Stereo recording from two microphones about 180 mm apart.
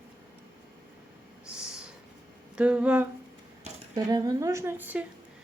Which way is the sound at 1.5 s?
5° right (ahead or behind).